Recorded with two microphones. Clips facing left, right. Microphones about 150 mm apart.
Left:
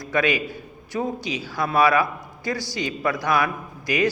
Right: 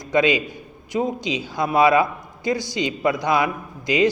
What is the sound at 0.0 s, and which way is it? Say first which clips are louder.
A man's voice: right 4 dB; 20° right (ahead or behind).